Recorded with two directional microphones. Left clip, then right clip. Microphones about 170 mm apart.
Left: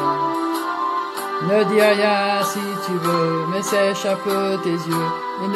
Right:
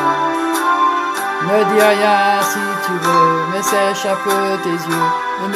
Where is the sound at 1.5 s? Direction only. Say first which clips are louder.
Right 3 dB; 5° left (ahead or behind).